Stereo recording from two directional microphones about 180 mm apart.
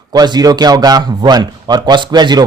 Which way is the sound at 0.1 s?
20° right (ahead or behind).